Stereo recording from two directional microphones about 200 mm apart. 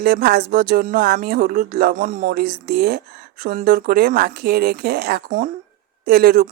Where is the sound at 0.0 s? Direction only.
50° right (ahead or behind).